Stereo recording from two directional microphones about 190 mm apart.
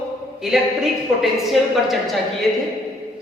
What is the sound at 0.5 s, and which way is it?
A woman's voice, centre (ahead or behind).